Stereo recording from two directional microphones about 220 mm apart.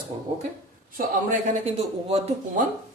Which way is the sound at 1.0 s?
35° right (ahead or behind).